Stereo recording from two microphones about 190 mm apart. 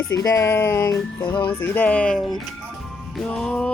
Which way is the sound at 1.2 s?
25° left (ahead or behind).